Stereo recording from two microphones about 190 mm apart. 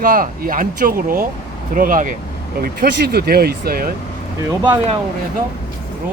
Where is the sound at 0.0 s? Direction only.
45° right (ahead or behind).